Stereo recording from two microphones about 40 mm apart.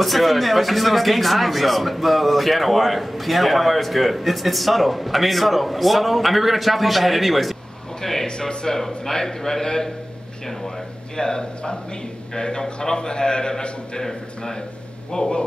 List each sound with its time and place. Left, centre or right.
0.0 s speech: centre
8.0 s a sound: centre
8.3 s a man's voice: centre
11.1 s a man's voice: centre